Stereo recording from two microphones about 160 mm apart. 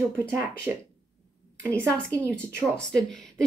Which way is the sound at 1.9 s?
20° right (ahead or behind).